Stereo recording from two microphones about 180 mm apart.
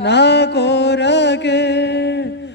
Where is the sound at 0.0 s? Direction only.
70° left (ahead or behind).